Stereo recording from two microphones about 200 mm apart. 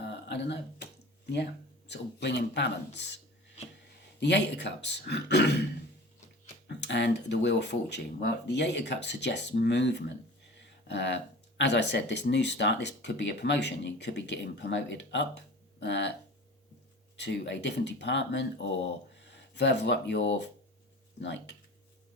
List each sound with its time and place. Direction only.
0.1 s a sound: 60° left (ahead or behind)
1.9 s speech: 60° left (ahead or behind)
4.2 s speech: 60° left (ahead or behind)
6.7 s speech: 60° left (ahead or behind)
17.2 s speech: 60° left (ahead or behind)